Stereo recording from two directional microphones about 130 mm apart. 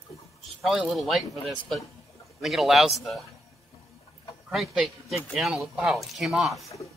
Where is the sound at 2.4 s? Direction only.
Centre (ahead or behind).